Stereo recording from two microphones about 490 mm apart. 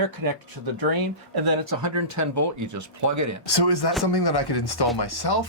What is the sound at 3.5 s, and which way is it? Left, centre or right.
Speech, left.